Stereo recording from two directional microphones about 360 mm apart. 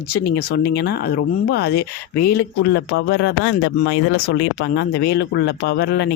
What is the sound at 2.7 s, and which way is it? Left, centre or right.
Speech, left.